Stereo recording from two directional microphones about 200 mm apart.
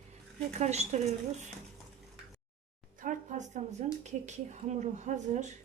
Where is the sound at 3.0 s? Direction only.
40° right (ahead or behind).